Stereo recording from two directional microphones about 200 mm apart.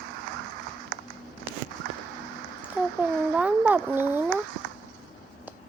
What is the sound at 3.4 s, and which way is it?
Speech, 10° right (ahead or behind).